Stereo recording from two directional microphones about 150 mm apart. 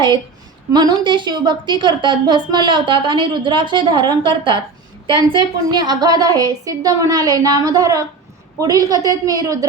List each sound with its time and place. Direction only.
0.7 s a woman's voice: 30° right (ahead or behind)